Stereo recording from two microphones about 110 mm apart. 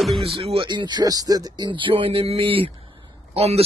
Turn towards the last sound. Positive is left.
turn(degrees=-65)  # may be behind; listen again after turning